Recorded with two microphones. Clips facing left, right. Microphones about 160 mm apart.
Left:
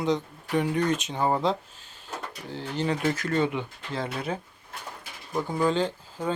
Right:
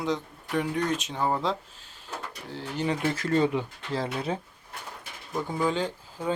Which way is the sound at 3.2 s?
30° right (ahead or behind).